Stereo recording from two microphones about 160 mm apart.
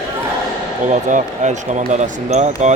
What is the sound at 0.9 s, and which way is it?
Speech, 50° right (ahead or behind).